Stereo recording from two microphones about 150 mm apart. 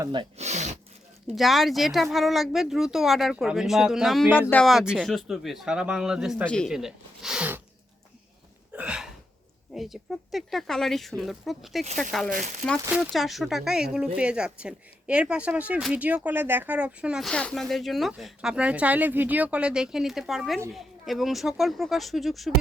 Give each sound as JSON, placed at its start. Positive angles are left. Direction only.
{"t": 0.0, "sound": "speech", "side_deg": -30}
{"t": 0.3, "sound": "a sound", "side_deg": -50}
{"t": 1.3, "sound": "speech", "side_deg": 0}
{"t": 4.4, "sound": "speech", "side_deg": 15}
{"t": 4.6, "sound": "speech", "side_deg": -5}
{"t": 6.4, "sound": "speech", "side_deg": 5}
{"t": 6.7, "sound": "zipper", "side_deg": -5}
{"t": 8.7, "sound": "hiccup", "side_deg": -5}
{"t": 9.7, "sound": "speech", "side_deg": 0}
{"t": 12.3, "sound": "speech", "side_deg": -60}
{"t": 12.9, "sound": "speech", "side_deg": 0}